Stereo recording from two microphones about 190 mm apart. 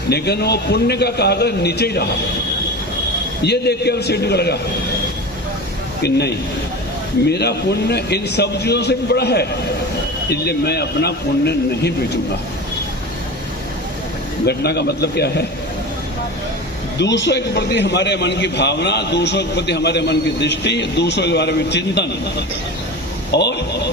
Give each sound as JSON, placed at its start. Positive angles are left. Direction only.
{"t": 0.1, "sound": "a man's voice", "side_deg": 60}
{"t": 3.4, "sound": "a man's voice", "side_deg": 60}
{"t": 6.0, "sound": "a man's voice", "side_deg": 60}
{"t": 14.4, "sound": "a man's voice", "side_deg": 60}
{"t": 17.0, "sound": "a man's voice", "side_deg": 65}
{"t": 23.3, "sound": "a man's voice", "side_deg": 60}